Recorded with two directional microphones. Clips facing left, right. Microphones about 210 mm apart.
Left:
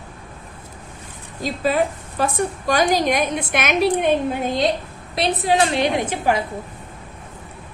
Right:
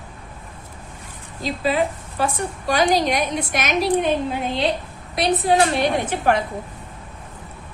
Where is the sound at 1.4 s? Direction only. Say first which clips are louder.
Left 1 dB; 45° left (ahead or behind).